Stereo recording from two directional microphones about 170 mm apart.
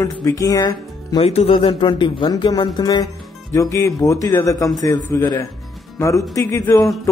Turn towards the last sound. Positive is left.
turn(degrees=20)  # may be behind; listen again after turning